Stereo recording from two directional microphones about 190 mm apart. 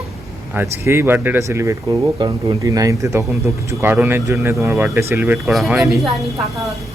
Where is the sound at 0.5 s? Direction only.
10° right (ahead or behind).